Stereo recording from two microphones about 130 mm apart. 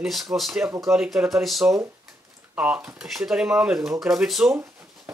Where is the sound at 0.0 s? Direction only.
Centre (ahead or behind).